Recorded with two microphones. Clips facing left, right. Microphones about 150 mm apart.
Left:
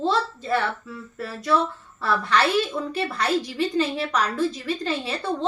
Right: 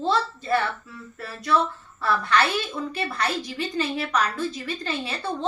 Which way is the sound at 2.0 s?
30° left (ahead or behind).